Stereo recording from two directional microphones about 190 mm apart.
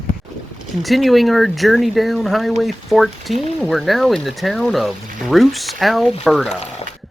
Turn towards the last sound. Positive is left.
turn(degrees=0)  # may be behind; listen again after turning